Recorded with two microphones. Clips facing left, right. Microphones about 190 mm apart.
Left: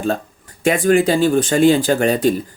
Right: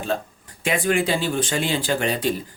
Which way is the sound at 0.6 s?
45° left (ahead or behind).